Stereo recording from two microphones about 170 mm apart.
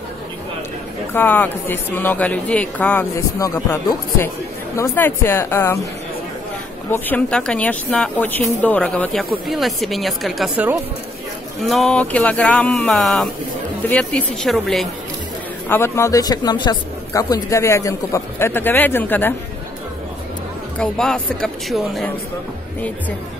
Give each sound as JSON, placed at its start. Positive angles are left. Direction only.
{"t": 1.1, "sound": "speech", "side_deg": 10}
{"t": 6.9, "sound": "speech", "side_deg": 10}
{"t": 15.7, "sound": "speech", "side_deg": 15}
{"t": 20.7, "sound": "speech", "side_deg": 5}